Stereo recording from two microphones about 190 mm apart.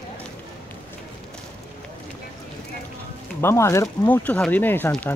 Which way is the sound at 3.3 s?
15° left (ahead or behind).